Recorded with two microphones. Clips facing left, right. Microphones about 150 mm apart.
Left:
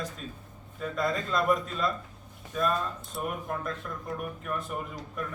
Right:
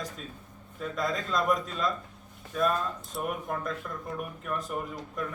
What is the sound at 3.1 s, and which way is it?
Speech, centre (ahead or behind).